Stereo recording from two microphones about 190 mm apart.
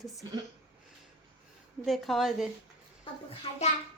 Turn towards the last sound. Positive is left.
turn(degrees=30)  # may be behind; listen again after turning